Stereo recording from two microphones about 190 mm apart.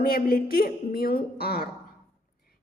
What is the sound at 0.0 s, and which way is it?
A woman's voice, 50° left (ahead or behind).